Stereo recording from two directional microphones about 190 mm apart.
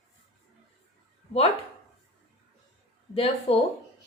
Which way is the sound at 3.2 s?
30° left (ahead or behind).